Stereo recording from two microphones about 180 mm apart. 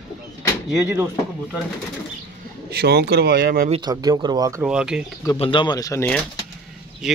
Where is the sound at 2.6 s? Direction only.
60° right (ahead or behind).